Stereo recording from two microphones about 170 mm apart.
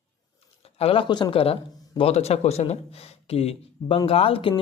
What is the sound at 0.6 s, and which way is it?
Speech, 35° left (ahead or behind).